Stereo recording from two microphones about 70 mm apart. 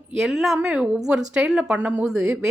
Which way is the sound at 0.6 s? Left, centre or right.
Centre.